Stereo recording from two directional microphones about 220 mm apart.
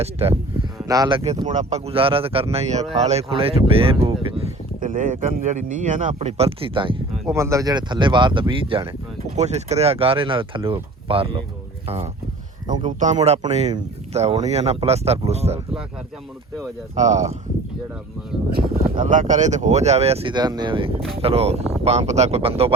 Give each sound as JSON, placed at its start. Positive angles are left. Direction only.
{"t": 0.0, "sound": "speech", "side_deg": -25}
{"t": 4.8, "sound": "speech", "side_deg": -35}
{"t": 12.9, "sound": "speech", "side_deg": -35}
{"t": 16.9, "sound": "speech", "side_deg": -30}
{"t": 18.5, "sound": "speech", "side_deg": -35}